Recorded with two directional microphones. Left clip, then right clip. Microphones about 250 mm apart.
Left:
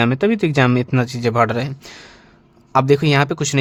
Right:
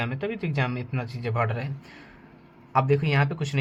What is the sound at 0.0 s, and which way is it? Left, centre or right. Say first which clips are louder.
Speech: left 13 dB; left.